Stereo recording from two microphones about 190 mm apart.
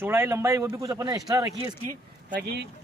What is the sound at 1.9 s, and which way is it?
Speech, 60° right (ahead or behind).